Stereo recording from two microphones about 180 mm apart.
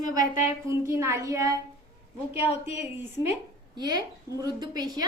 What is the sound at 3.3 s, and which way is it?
A woman's voice, 20° right (ahead or behind).